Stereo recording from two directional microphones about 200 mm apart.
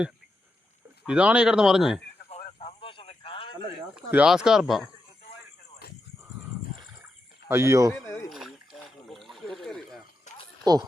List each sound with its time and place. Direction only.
1.0 s speech: 5° right (ahead or behind)
2.6 s radio: 25° left (ahead or behind)
3.9 s speech: 5° right (ahead or behind)
7.4 s speech: 10° right (ahead or behind)
8.0 s speech: 15° left (ahead or behind)
8.3 s a sound: 5° right (ahead or behind)
10.3 s a sound: 35° left (ahead or behind)
10.7 s speech: 20° right (ahead or behind)